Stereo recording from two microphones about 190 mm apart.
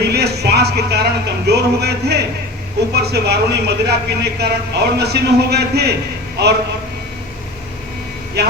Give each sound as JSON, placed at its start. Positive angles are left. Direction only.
{"t": 0.0, "sound": "speech", "side_deg": -60}
{"t": 8.4, "sound": "speech", "side_deg": -60}